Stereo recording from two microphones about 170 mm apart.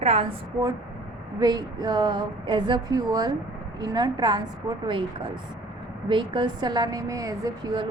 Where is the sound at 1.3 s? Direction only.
20° right (ahead or behind).